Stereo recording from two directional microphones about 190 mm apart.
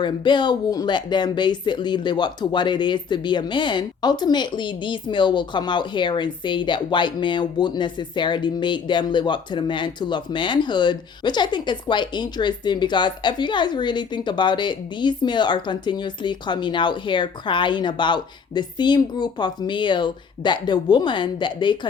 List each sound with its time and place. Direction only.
0.0 s speech: 25° left (ahead or behind)